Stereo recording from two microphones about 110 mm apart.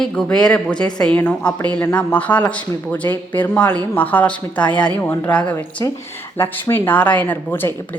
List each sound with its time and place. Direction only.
0.0 s speech: 5° left (ahead or behind)